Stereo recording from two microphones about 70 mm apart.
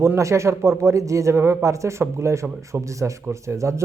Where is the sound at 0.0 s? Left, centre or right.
Right.